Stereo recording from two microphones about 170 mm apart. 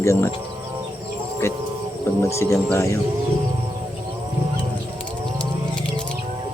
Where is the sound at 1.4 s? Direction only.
15° left (ahead or behind).